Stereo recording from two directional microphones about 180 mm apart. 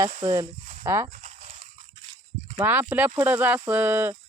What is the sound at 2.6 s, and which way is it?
Speech, 10° right (ahead or behind).